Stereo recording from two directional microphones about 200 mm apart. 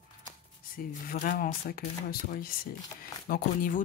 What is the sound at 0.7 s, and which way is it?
Speech, 45° left (ahead or behind).